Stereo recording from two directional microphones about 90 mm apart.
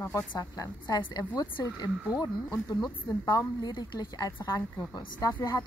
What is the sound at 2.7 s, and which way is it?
A woman's voice, 45° left (ahead or behind).